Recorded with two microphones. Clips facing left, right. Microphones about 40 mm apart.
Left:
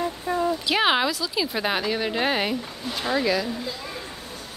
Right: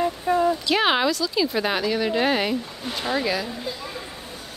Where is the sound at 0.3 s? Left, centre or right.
Centre.